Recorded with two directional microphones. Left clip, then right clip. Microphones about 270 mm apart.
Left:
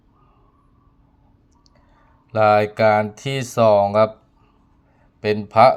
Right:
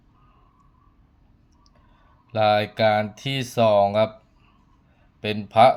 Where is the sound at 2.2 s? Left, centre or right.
Centre.